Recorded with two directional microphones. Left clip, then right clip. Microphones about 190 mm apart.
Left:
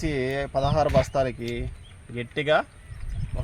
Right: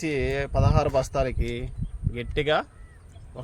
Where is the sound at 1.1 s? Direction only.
25° right (ahead or behind).